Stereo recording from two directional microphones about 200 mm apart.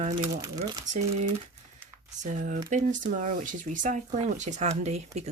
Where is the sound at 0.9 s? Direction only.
35° right (ahead or behind).